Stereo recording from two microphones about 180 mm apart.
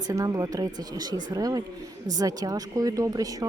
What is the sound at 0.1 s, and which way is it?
Speech, 20° right (ahead or behind).